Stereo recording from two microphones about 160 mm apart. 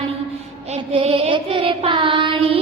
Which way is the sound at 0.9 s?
35° right (ahead or behind).